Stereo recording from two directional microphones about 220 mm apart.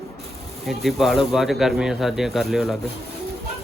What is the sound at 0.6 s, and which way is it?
Speech, centre (ahead or behind).